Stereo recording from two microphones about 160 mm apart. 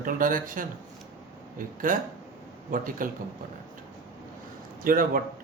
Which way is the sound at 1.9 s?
60° right (ahead or behind).